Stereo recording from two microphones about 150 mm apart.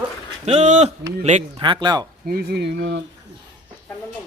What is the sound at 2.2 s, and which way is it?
Speech, 90° right.